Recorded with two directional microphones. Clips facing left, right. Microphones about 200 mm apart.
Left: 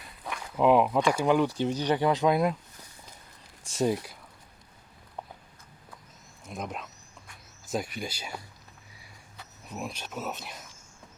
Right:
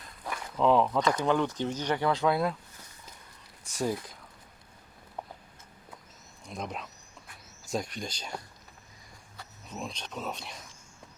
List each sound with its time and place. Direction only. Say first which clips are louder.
0.5 s speech: left 2 dB; 15° left (ahead or behind)
3.6 s speech: left 4 dB; 25° left (ahead or behind)
6.4 s speech: left 1 dB; centre (ahead or behind)
9.6 s speech: left 2 dB; 5° left (ahead or behind)